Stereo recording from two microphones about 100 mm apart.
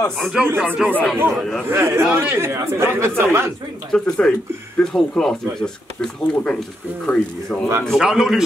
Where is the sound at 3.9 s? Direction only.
5° left (ahead or behind).